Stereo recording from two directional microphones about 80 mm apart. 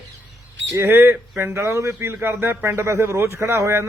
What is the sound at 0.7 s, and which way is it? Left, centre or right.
Speech, right.